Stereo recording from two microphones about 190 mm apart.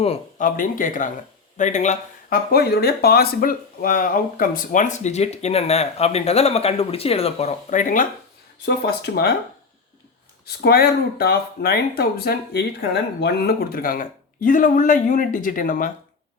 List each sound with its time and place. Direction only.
0.0 s speech: 30° left (ahead or behind)
0.4 s speech: 45° left (ahead or behind)
2.5 s speech: 55° left (ahead or behind)
8.6 s speech: 60° left (ahead or behind)
10.4 s speech: 55° left (ahead or behind)